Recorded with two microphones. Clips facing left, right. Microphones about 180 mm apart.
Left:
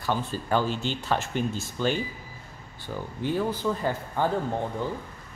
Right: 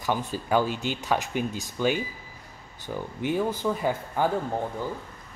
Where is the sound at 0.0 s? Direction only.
15° right (ahead or behind).